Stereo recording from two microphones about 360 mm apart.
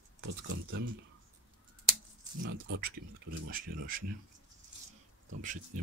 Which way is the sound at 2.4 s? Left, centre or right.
Right.